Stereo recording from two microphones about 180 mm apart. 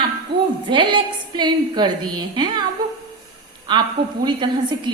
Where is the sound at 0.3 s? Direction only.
25° right (ahead or behind).